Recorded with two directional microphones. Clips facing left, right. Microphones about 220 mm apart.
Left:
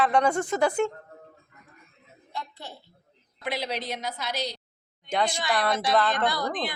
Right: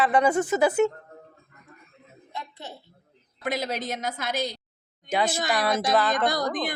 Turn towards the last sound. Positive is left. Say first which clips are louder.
# right 2 dB
turn(degrees=-45)  # may be behind; listen again after turning